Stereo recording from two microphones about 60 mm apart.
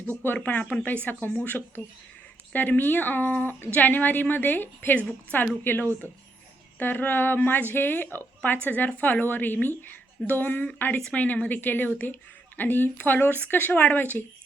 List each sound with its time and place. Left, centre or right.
0.4 s speech: left